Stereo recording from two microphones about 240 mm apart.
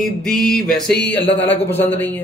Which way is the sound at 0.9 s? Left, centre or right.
Left.